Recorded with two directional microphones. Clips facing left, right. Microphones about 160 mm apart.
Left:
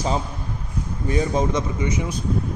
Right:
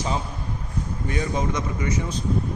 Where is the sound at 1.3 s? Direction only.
30° left (ahead or behind).